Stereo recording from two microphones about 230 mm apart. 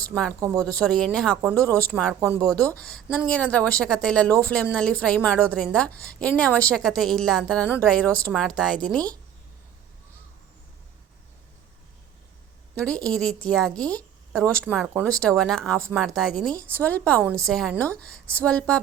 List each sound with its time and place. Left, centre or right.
0.3 s speech: centre
0.7 s speech: centre
12.7 s a woman's voice: centre